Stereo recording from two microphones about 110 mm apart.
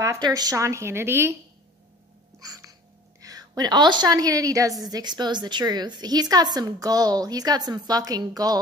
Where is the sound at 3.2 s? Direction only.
35° right (ahead or behind).